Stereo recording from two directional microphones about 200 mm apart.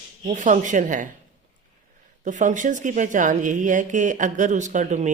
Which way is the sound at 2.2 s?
40° right (ahead or behind).